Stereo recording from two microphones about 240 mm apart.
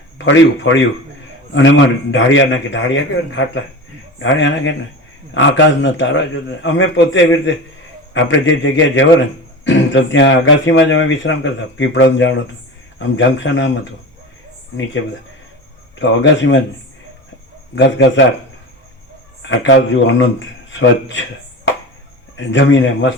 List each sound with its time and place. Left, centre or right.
0.3 s speech: left
16.0 s speech: left
17.7 s speech: left
19.4 s speech: left